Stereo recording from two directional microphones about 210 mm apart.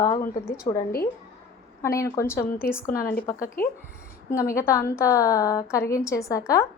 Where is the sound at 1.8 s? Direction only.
15° left (ahead or behind).